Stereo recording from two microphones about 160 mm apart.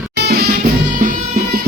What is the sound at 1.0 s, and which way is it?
Music, 55° right (ahead or behind).